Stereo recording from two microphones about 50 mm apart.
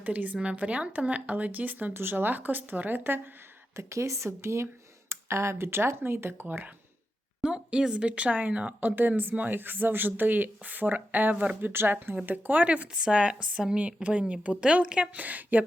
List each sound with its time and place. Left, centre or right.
0.0 s speech: right
1.9 s speech: right
3.8 s speech: right
7.4 s speech: centre; by 12.1 s right
12.2 s speech: right; by 15.1 s centre
15.1 s speech: right